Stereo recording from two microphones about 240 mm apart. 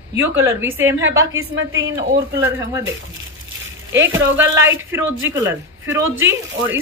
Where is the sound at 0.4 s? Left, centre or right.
Centre.